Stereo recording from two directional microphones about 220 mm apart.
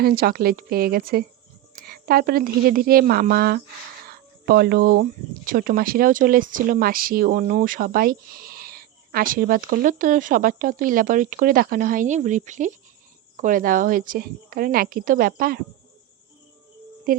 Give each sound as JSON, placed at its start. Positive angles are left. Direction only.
{"t": 0.0, "sound": "a woman's voice", "side_deg": -45}
{"t": 17.1, "sound": "speech", "side_deg": -40}